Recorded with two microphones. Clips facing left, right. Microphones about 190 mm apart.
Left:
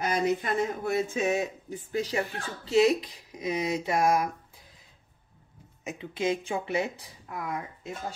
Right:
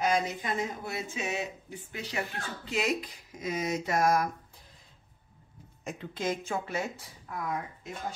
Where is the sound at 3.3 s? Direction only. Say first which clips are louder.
Left 3 dB; 15° left (ahead or behind).